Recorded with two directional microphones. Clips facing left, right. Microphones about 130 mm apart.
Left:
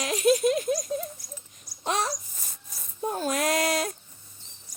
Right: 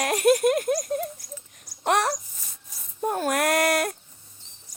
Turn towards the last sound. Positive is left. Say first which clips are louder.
# right 3 dB
turn(degrees=-60)  # may be behind; listen again after turning